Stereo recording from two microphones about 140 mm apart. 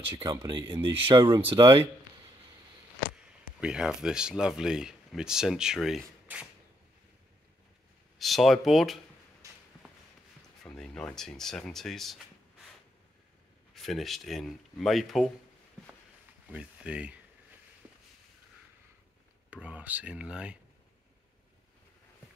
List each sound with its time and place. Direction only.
0.1 s speech: 30° right (ahead or behind)
3.6 s speech: 5° right (ahead or behind)
8.2 s speech: centre (ahead or behind)
9.4 s a sound: 25° right (ahead or behind)
10.6 s speech: 5° left (ahead or behind)
13.7 s speech: centre (ahead or behind)
16.4 s speech: 10° right (ahead or behind)
17.8 s a sound: 10° right (ahead or behind)
19.5 s speech: 10° right (ahead or behind)